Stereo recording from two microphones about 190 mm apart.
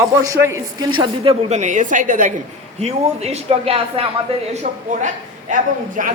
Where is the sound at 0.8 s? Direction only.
25° right (ahead or behind).